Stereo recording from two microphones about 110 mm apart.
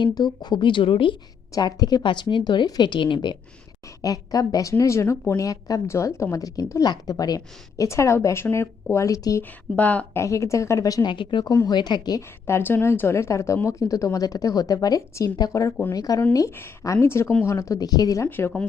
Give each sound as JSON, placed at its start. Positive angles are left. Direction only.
{"t": 0.0, "sound": "speech", "side_deg": 40}
{"t": 1.5, "sound": "speech", "side_deg": 40}
{"t": 4.0, "sound": "a woman's voice", "side_deg": 35}
{"t": 9.4, "sound": "speech", "side_deg": 15}
{"t": 10.2, "sound": "a woman's voice", "side_deg": 30}
{"t": 11.1, "sound": "speech", "side_deg": 45}
{"t": 11.5, "sound": "speech", "side_deg": 35}
{"t": 12.5, "sound": "a woman's voice", "side_deg": 20}
{"t": 18.3, "sound": "speech", "side_deg": 20}